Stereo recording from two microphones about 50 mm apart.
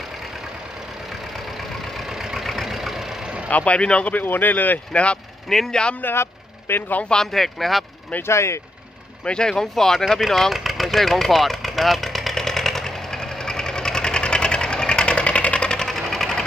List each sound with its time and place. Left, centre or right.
2.0 s vehicle: centre
3.4 s speech: left
4.1 s speech: left
4.9 s speech: left
5.5 s speech: centre
6.0 s speech: left
7.2 s speech: centre
8.2 s speech: left
9.2 s speech: centre
10.2 s vehicle: centre
15.9 s sewing machine: centre